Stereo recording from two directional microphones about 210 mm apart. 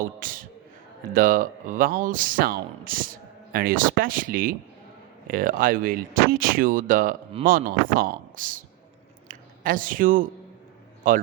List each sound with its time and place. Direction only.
0.2 s speech: 40° right (ahead or behind)